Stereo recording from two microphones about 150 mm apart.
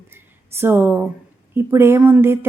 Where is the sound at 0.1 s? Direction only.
15° right (ahead or behind).